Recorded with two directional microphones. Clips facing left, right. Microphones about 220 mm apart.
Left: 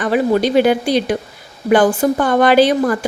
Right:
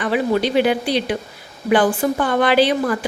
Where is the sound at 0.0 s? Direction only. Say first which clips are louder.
Left 4 dB; 45° left (ahead or behind).